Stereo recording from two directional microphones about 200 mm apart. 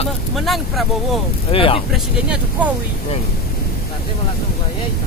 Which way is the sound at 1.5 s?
25° left (ahead or behind).